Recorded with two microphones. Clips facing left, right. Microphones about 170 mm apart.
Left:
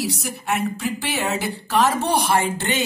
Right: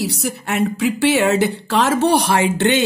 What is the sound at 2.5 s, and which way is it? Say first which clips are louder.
Speech: right 8 dB; 70° right (ahead or behind).